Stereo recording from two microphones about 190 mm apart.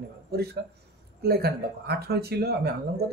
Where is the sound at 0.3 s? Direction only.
55° right (ahead or behind).